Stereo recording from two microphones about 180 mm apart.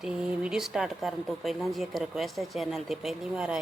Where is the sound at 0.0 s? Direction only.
Centre (ahead or behind).